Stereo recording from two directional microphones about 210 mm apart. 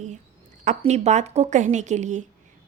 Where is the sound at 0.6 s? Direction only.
35° right (ahead or behind).